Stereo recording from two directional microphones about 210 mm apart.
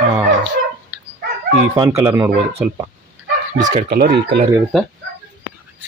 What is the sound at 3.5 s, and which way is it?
Speech, 35° right (ahead or behind).